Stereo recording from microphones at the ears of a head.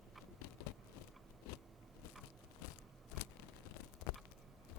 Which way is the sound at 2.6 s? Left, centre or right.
Left.